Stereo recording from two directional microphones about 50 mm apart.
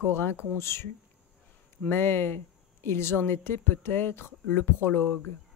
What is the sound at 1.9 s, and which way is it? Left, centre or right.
Speech, left.